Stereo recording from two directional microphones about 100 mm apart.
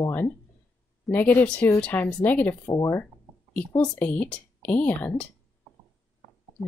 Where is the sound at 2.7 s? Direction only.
35° left (ahead or behind).